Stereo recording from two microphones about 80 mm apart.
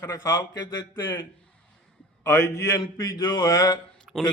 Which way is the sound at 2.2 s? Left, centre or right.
Left.